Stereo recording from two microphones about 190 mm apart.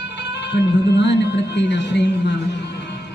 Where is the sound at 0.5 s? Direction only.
65° left (ahead or behind).